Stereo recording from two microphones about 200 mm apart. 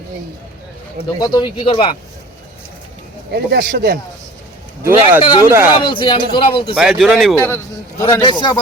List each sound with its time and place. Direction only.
1.2 s a man's voice: 20° left (ahead or behind)
3.3 s speech: 50° right (ahead or behind)
4.8 s speech: 10° right (ahead or behind)
5.2 s a man's voice: 25° left (ahead or behind)
5.5 s speech: 10° right (ahead or behind)
5.8 s a man's voice: 25° left (ahead or behind)
6.7 s speech: centre (ahead or behind)
7.4 s a man's voice: 15° left (ahead or behind)